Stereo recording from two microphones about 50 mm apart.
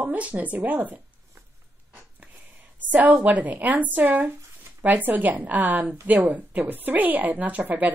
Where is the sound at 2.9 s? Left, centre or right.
Right.